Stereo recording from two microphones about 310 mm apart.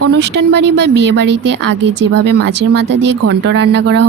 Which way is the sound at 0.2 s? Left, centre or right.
Right.